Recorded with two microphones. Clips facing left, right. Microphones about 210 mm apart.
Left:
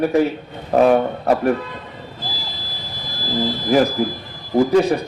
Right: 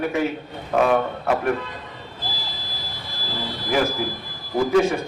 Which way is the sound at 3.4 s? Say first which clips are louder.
Left 6 dB; 40° left (ahead or behind).